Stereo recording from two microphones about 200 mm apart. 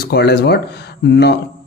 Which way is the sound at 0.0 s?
55° left (ahead or behind).